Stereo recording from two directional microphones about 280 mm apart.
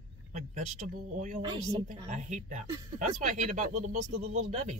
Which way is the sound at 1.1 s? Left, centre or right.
Right.